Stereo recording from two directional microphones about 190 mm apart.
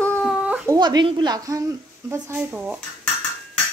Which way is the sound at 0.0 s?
5° left (ahead or behind).